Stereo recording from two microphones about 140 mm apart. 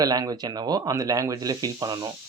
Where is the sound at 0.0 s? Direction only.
25° right (ahead or behind).